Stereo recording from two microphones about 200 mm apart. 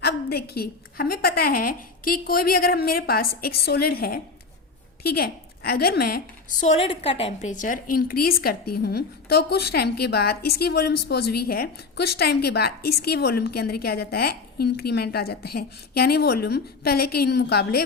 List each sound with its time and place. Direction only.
0.0 s a woman's voice: 50° left (ahead or behind)